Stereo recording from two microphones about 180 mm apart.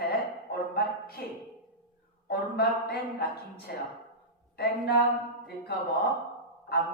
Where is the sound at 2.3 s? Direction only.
60° left (ahead or behind).